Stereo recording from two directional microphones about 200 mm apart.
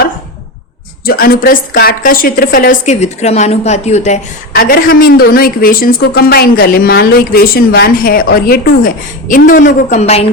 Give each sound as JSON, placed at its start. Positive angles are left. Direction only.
{"t": 1.0, "sound": "a woman's voice", "side_deg": 50}
{"t": 4.5, "sound": "a woman's voice", "side_deg": 45}